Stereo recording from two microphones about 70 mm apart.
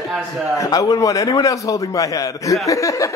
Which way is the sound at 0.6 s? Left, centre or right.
Left.